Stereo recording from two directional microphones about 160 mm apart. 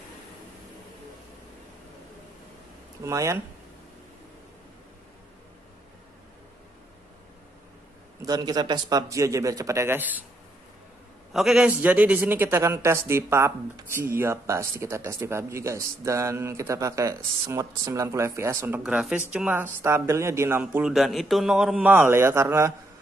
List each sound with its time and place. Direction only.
3.0 s a man's voice: 20° right (ahead or behind)
8.3 s a man's voice: 25° right (ahead or behind)
11.3 s a man's voice: 5° right (ahead or behind)
18.8 s a man's voice: 5° right (ahead or behind)
20.6 s a man's voice: 5° right (ahead or behind)